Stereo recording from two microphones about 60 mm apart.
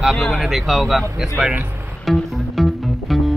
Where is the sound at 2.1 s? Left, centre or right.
Centre.